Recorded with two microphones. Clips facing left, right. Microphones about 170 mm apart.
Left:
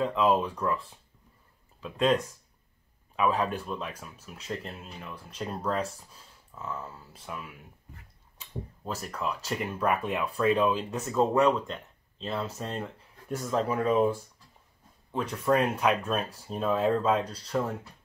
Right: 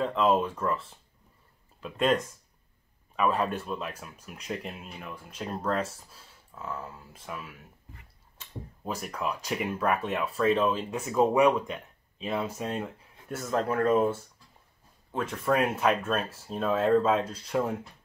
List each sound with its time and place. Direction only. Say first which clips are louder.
0.0 s speech: even; centre (ahead or behind)
3.2 s speech: even; centre (ahead or behind)
8.8 s speech: right 1 dB; 10° right (ahead or behind); by 14.1 s 10° left (ahead or behind)
15.3 s speech: left 1 dB; centre (ahead or behind)